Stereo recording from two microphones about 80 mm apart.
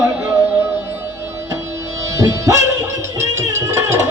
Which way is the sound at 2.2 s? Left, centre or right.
Right.